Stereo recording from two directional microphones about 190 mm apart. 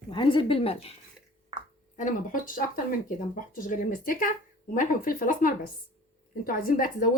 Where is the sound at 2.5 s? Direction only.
45° left (ahead or behind).